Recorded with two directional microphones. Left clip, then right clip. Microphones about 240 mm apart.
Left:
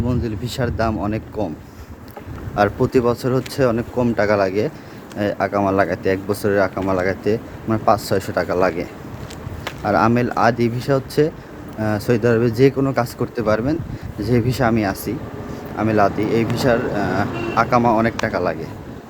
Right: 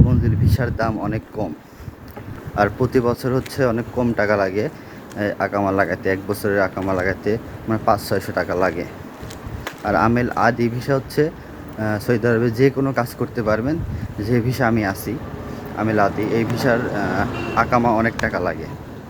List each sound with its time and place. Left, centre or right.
0.1 s speech: centre
2.6 s speech: centre